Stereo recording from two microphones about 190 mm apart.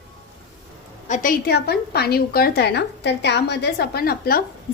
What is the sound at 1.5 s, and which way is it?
A woman's voice, 55° left (ahead or behind).